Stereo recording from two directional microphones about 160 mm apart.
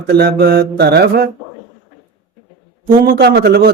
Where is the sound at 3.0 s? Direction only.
75° right (ahead or behind).